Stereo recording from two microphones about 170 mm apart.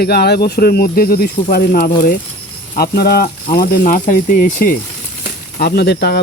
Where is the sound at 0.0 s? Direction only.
70° left (ahead or behind).